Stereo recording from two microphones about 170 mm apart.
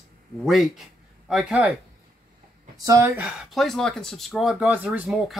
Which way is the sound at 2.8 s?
15° right (ahead or behind).